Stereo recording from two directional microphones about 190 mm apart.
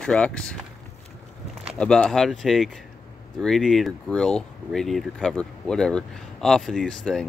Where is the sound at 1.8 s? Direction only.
5° left (ahead or behind).